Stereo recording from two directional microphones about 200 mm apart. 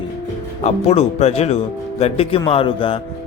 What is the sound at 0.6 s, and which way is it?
Speech, 30° left (ahead or behind).